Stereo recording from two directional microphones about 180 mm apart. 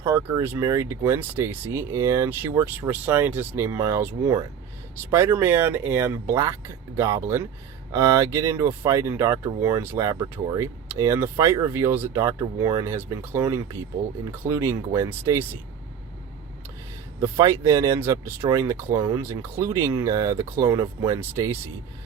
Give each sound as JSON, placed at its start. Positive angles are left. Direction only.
{"t": 0.0, "sound": "speech", "side_deg": -15}
{"t": 17.2, "sound": "speech", "side_deg": -15}